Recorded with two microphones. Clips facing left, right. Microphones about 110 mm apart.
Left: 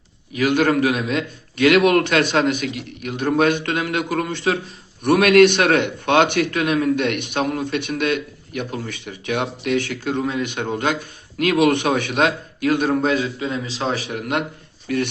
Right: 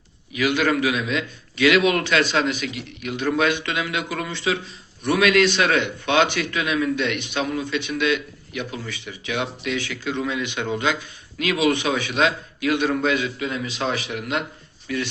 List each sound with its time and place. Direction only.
0.3 s a man's voice: 50° left (ahead or behind)